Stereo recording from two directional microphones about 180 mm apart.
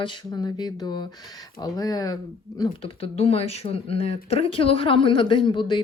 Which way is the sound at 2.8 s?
30° left (ahead or behind).